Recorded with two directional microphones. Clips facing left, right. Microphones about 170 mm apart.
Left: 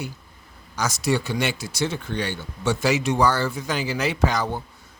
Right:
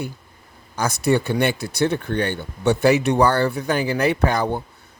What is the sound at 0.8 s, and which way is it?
Speech, 55° right (ahead or behind).